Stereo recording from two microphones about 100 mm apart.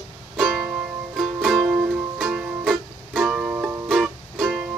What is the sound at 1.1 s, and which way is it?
Music, 5° right (ahead or behind).